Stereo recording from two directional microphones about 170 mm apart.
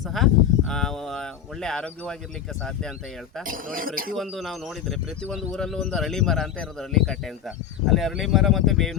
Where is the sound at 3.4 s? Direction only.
55° right (ahead or behind).